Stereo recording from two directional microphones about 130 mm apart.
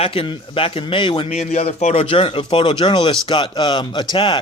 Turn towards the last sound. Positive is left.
turn(degrees=35)  # may be behind; listen again after turning